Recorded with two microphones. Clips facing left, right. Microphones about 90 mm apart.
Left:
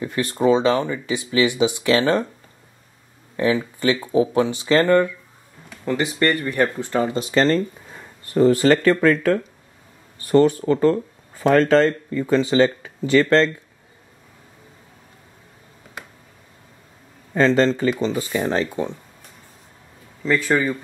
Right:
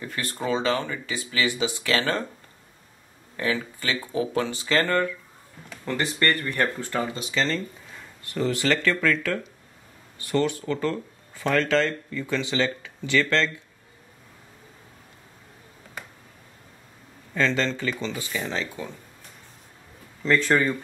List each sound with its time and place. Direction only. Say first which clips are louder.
0.0 s speech: left 10 dB; 20° left (ahead or behind)
3.3 s speech: left 7 dB; 20° left (ahead or behind)
7.1 s speech: left 8 dB; 40° left (ahead or behind)
17.3 s speech: left 8 dB; 40° left (ahead or behind)
20.2 s speech: left 2 dB; 5° left (ahead or behind)